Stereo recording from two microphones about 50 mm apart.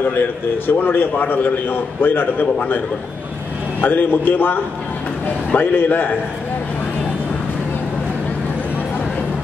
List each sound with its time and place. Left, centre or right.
0.7 s a man's voice: left
3.8 s a man's voice: left
5.6 s a man's voice: left